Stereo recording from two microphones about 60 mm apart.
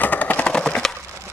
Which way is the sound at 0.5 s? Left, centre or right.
Centre.